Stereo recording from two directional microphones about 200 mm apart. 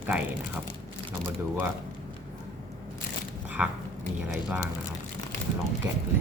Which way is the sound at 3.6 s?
5° right (ahead or behind).